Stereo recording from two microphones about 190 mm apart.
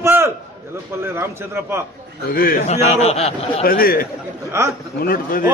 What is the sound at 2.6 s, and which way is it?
A man's voice, 35° left (ahead or behind).